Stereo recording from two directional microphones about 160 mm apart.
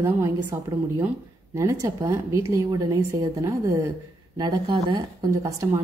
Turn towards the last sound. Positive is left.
turn(degrees=-20)  # may be behind; listen again after turning